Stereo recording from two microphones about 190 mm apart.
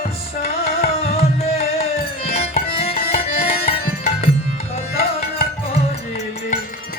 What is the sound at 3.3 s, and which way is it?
Tabla, 50° left (ahead or behind).